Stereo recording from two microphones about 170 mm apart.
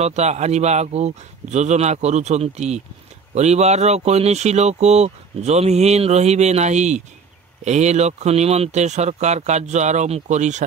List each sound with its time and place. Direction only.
0.0 s speech: 40° right (ahead or behind)